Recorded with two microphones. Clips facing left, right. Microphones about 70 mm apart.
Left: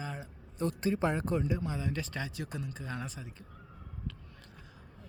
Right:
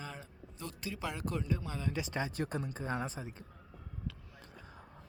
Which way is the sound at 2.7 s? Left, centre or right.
Right.